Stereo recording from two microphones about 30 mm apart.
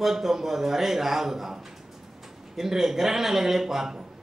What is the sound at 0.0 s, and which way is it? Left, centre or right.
A man's voice, centre.